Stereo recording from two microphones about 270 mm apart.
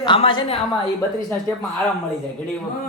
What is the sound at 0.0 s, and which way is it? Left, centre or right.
Speech, centre.